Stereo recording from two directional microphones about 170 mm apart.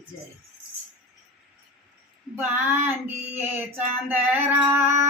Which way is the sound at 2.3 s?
10° right (ahead or behind).